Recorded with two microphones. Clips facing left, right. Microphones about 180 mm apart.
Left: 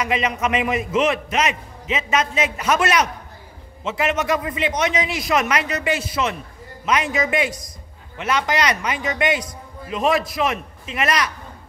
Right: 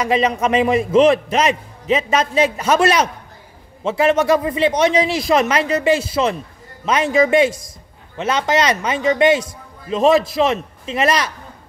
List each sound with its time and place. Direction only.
0.0 s a man's voice: 35° right (ahead or behind)